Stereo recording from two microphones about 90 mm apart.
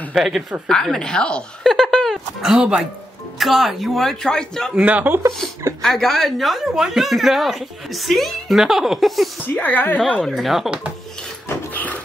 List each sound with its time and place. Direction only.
0.1 s a woman's voice: 5° right (ahead or behind)
0.7 s speech: 5° left (ahead or behind)
2.4 s a woman's voice: 5° right (ahead or behind)
4.7 s speech: 15° right (ahead or behind)
5.8 s a woman's voice: 5° left (ahead or behind)
9.6 s a woman's voice: 20° left (ahead or behind)
9.9 s speech: 10° left (ahead or behind)
10.3 s a woman's voice: centre (ahead or behind)
11.4 s a sound: 20° left (ahead or behind)